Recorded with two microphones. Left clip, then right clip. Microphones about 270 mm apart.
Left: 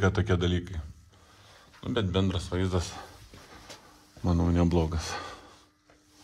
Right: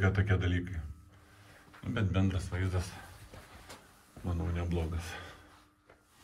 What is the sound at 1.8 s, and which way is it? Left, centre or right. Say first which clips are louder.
Speech: left 6 dB; centre.